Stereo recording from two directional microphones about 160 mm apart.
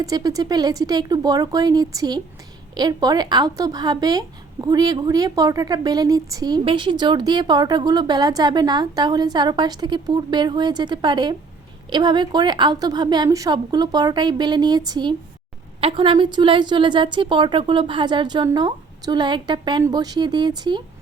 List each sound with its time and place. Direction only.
0.0 s a woman's voice: 25° right (ahead or behind)